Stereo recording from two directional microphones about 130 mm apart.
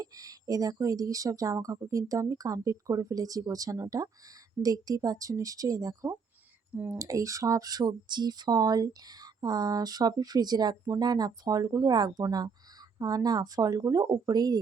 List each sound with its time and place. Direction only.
0.0 s speech: 25° right (ahead or behind)
6.7 s speech: 15° right (ahead or behind)
7.0 s speech: 25° right (ahead or behind)